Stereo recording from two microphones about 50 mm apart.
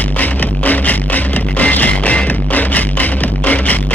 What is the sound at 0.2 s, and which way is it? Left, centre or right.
Music, left.